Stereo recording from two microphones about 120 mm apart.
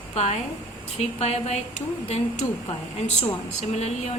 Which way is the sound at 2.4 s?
45° left (ahead or behind).